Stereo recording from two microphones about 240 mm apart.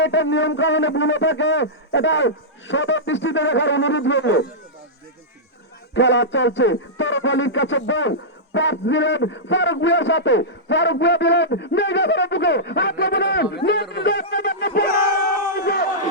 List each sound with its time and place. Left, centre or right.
0.0 s a man's voice: left
5.9 s a man's voice: left